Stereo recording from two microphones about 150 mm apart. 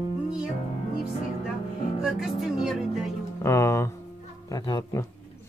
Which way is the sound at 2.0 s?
5° right (ahead or behind).